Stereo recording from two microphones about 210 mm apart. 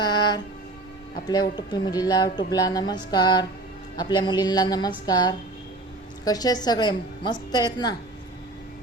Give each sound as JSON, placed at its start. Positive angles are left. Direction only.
{"t": 0.0, "sound": "train", "side_deg": 20}
{"t": 1.3, "sound": "a woman's voice", "side_deg": 20}